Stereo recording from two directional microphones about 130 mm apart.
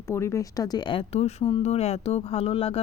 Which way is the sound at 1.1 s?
50° left (ahead or behind).